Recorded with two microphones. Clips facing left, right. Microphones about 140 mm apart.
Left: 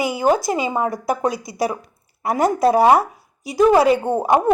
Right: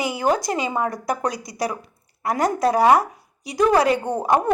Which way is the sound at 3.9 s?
20° left (ahead or behind).